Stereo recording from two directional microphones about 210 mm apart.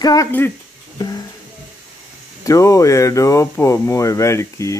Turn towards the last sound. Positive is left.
turn(degrees=15)  # may be behind; listen again after turning